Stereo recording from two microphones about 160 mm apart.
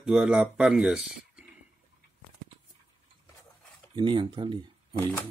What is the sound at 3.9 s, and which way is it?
Speech, 30° right (ahead or behind).